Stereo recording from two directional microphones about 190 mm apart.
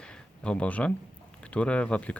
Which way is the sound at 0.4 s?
5° left (ahead or behind).